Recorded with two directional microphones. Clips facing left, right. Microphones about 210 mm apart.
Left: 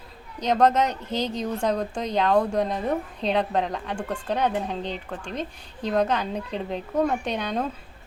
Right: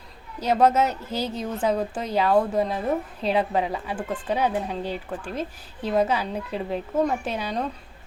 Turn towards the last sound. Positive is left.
turn(degrees=0)  # may be behind; listen again after turning